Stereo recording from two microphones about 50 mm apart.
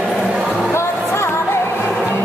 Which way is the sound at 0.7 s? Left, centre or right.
Left.